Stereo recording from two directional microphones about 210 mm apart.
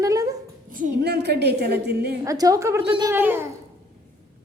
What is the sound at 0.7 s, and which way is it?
A woman's voice, 40° right (ahead or behind).